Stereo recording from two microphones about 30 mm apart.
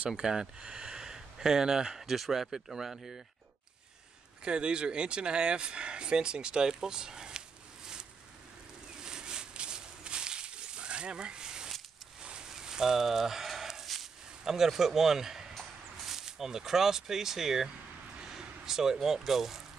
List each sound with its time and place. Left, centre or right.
0.1 s speech: right
2.1 s speech: centre
2.5 s speech: centre
4.5 s speech: right
9.0 s a sound: right; by 13.8 s centre
14.4 s speech: centre